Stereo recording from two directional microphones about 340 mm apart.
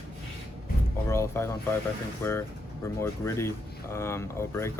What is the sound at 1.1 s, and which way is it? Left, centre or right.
Speech, centre.